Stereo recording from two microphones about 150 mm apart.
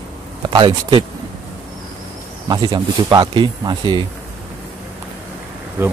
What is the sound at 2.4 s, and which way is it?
Speech, 30° right (ahead or behind).